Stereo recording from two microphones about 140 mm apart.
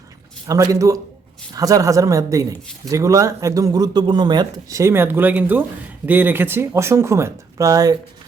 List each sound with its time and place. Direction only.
0.4 s a man's voice: 25° right (ahead or behind)